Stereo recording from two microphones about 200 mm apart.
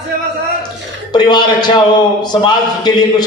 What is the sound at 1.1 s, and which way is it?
A man's voice, 20° left (ahead or behind).